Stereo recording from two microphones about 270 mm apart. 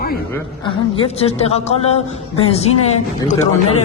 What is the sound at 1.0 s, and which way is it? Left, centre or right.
A man's voice, left.